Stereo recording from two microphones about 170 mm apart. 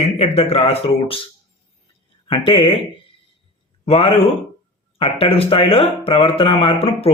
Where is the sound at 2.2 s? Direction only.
30° left (ahead or behind).